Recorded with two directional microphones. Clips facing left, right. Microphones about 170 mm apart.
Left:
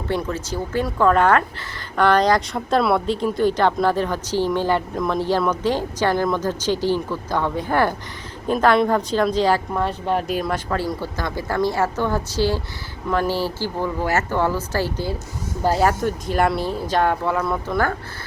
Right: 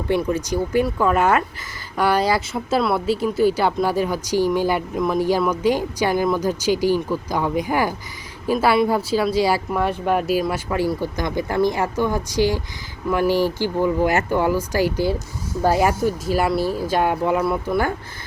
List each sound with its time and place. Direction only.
0.1 s speech: 15° right (ahead or behind)